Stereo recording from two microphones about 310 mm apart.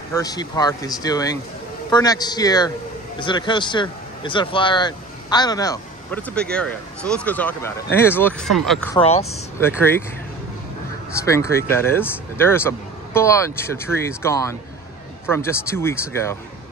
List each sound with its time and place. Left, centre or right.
0.1 s speech: centre
8.9 s speech: centre
9.6 s speech: centre
11.1 s speech: centre